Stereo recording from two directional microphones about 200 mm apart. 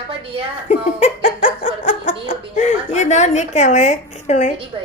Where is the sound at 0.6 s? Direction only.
35° left (ahead or behind).